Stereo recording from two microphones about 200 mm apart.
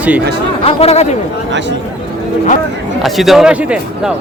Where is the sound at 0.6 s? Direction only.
30° left (ahead or behind).